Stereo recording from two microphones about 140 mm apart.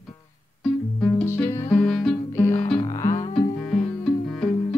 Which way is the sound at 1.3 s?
20° left (ahead or behind).